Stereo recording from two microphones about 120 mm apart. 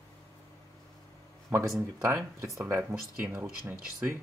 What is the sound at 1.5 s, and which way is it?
Speech, 25° right (ahead or behind).